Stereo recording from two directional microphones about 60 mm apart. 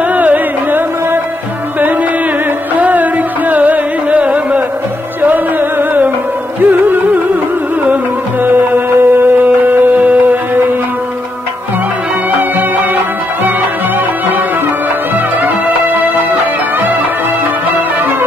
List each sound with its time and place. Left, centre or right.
0.0 s music: right
2.7 s music: right